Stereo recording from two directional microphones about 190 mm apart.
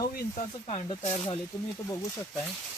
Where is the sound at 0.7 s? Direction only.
30° left (ahead or behind).